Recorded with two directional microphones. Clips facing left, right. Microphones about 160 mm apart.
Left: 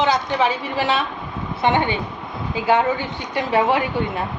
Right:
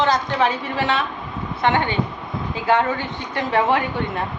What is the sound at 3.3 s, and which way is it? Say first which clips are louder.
Speech: left 1 dB; 15° left (ahead or behind).